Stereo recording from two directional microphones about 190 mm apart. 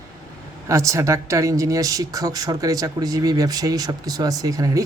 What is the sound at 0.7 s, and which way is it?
Speech, 15° right (ahead or behind).